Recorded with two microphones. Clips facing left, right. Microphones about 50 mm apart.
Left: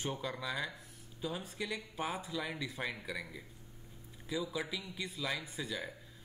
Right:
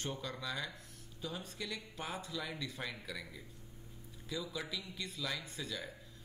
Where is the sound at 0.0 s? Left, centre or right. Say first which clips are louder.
Left 3 dB; centre.